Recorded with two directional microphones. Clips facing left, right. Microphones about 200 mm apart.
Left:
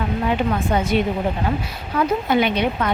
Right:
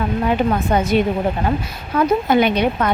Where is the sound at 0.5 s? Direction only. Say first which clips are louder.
Right 3 dB; 40° right (ahead or behind).